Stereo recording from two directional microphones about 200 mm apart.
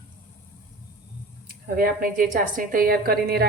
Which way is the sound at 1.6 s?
45° right (ahead or behind).